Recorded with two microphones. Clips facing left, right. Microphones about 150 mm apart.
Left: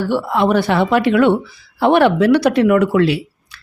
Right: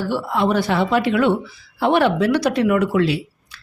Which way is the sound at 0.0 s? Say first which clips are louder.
Left 4 dB; 65° left (ahead or behind).